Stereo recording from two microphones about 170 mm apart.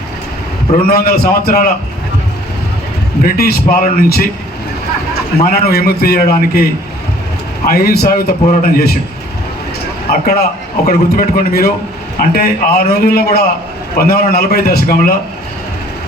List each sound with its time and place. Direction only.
0.9 s a man's voice: 65° left (ahead or behind)
3.2 s a man's voice: 65° left (ahead or behind)
5.5 s a man's voice: 65° left (ahead or behind)
7.7 s a man's voice: 65° left (ahead or behind)
10.1 s a man's voice: 65° left (ahead or behind)